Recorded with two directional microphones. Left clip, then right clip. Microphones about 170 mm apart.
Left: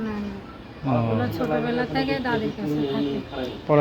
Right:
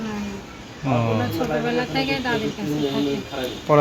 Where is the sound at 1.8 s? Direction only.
15° left (ahead or behind).